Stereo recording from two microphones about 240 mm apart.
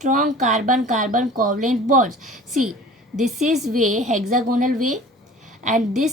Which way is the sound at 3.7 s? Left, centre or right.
Right.